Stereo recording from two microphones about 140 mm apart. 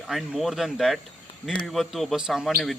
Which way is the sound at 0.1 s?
Centre (ahead or behind).